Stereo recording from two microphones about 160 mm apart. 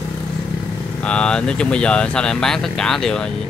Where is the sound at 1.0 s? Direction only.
5° left (ahead or behind).